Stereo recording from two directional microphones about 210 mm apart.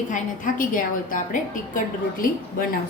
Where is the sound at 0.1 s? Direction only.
40° left (ahead or behind).